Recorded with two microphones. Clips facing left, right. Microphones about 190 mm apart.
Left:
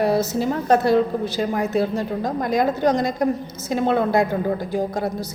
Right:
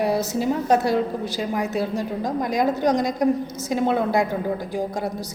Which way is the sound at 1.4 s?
Centre (ahead or behind).